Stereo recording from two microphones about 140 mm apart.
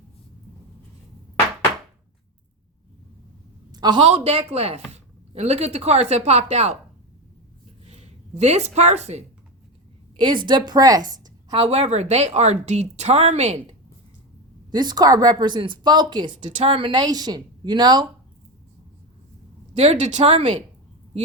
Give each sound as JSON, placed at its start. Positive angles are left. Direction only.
{"t": 3.7, "sound": "a sound", "side_deg": -30}
{"t": 4.0, "sound": "a woman's voice", "side_deg": -50}
{"t": 7.9, "sound": "speech", "side_deg": -50}
{"t": 10.2, "sound": "a woman's voice", "side_deg": -35}
{"t": 11.5, "sound": "speech", "side_deg": -45}
{"t": 14.7, "sound": "a woman's voice", "side_deg": -30}
{"t": 19.7, "sound": "speech", "side_deg": -50}